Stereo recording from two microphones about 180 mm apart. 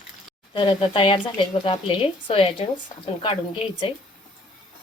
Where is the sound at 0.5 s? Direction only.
25° left (ahead or behind).